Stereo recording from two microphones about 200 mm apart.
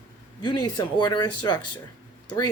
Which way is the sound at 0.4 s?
20° left (ahead or behind).